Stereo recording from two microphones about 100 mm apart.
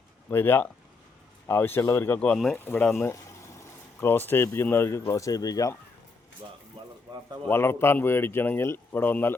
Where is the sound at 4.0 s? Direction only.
20° left (ahead or behind); by 5.7 s 40° left (ahead or behind).